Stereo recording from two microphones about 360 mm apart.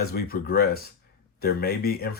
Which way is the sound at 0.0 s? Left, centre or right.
Left.